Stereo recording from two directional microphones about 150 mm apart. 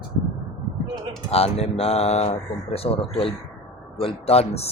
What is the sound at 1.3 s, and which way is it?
Speech, 45° left (ahead or behind).